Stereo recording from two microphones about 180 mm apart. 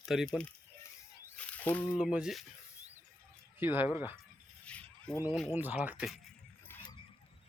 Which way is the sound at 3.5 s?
10° right (ahead or behind).